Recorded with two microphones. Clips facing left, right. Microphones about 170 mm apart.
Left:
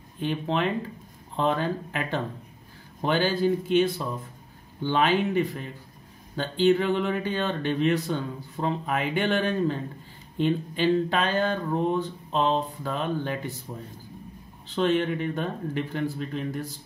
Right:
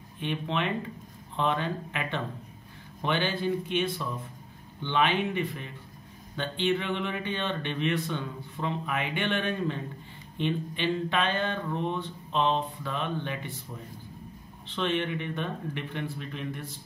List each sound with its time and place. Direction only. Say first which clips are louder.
0.2 s speech: left 4 dB; 35° left (ahead or behind)
14.7 s speech: left 5 dB; 40° left (ahead or behind)